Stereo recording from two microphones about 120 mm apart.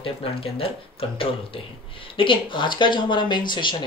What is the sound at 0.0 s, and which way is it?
Speech, 50° left (ahead or behind).